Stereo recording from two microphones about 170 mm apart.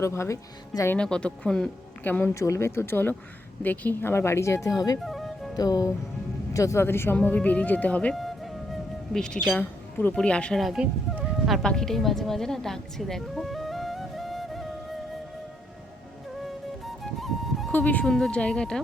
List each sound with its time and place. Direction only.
0.0 s speech: 15° left (ahead or behind)
0.9 s speech: 5° left (ahead or behind); by 4.9 s 20° left (ahead or behind)
5.0 s music: centre (ahead or behind)
5.5 s speech: 20° left (ahead or behind); by 14.7 s centre (ahead or behind)
16.8 s music: centre (ahead or behind)
17.7 s speech: 10° left (ahead or behind)